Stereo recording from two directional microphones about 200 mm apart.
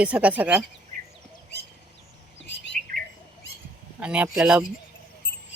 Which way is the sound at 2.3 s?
60° left (ahead or behind).